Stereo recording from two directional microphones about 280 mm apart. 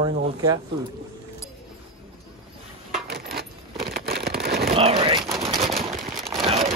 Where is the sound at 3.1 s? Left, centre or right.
Right.